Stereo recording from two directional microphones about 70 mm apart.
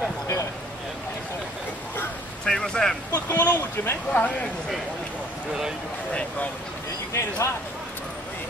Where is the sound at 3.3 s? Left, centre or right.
Left.